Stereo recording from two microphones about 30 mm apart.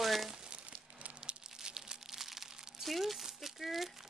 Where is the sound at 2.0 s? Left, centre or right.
Centre.